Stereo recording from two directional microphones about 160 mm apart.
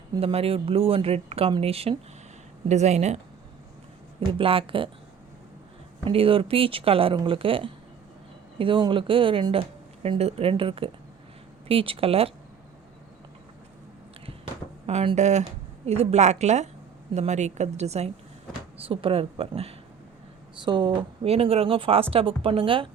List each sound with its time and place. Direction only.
0.2 s a woman's voice: 35° right (ahead or behind)
4.3 s speech: 35° right (ahead or behind)
6.1 s speech: 35° right (ahead or behind)
14.8 s a woman's voice: 45° right (ahead or behind)